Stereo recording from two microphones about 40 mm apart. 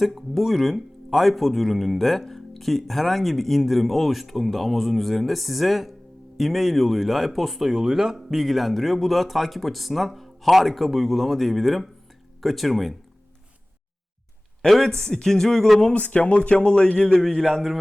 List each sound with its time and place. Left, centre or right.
0.0 s speech: centre
14.7 s a man's voice: centre
15.9 s speech: left
17.2 s speech: centre